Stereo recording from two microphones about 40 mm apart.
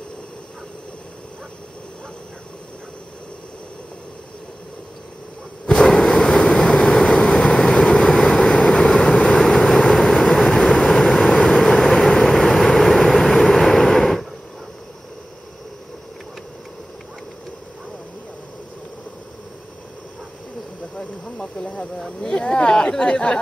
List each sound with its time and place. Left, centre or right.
5.7 s vehicle: centre
7.8 s vehicle: centre
9.4 s vehicle: centre
22.2 s a sound: left